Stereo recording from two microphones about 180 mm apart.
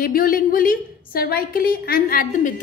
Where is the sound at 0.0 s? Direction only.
50° left (ahead or behind).